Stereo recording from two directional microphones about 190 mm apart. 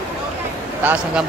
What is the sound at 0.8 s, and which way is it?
Speech, 5° right (ahead or behind).